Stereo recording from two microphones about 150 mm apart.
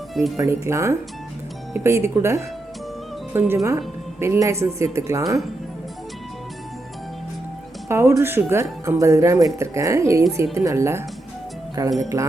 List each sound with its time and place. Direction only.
0.1 s speech: centre (ahead or behind)
0.3 s speech: 20° right (ahead or behind)
7.9 s speech: 20° right (ahead or behind)